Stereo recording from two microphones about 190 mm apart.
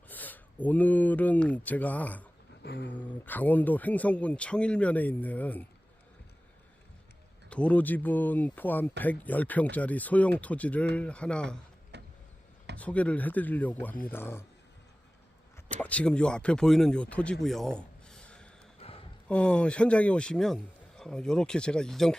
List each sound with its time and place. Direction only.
0.1 s speech: 10° left (ahead or behind)
2.6 s dog: 60° left (ahead or behind)
3.0 s speech: 10° left (ahead or behind)
7.5 s a man's voice: 5° left (ahead or behind)
11.9 s vehicle: 65° right (ahead or behind)
12.8 s speech: 5° left (ahead or behind)
15.5 s a man's voice: 5° left (ahead or behind)
17.4 s a sound: centre (ahead or behind)
18.8 s a sound: 30° left (ahead or behind)
19.3 s a man's voice: 5° left (ahead or behind)